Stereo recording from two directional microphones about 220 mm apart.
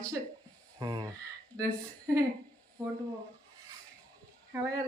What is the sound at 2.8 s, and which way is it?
Speech, 5° left (ahead or behind).